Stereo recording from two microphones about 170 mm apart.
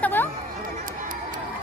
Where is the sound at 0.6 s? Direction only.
55° right (ahead or behind).